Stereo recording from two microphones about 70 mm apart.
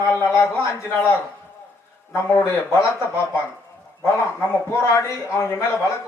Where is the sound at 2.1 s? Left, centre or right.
Left.